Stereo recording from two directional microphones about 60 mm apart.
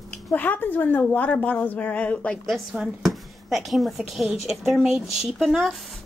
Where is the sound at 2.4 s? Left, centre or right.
Centre.